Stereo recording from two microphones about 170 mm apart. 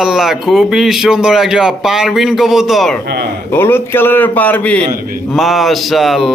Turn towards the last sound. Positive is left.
turn(degrees=0)  # may be behind; listen again after turning